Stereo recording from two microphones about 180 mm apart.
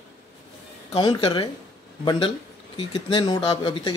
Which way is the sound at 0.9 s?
25° left (ahead or behind).